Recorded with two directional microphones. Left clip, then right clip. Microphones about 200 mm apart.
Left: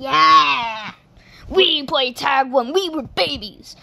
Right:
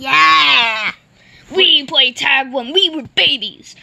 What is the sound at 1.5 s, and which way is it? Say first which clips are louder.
Speech: right 5 dB; 5° left (ahead or behind).